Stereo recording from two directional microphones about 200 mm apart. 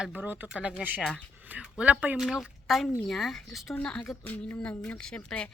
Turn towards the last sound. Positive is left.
turn(degrees=5)  # may be behind; listen again after turning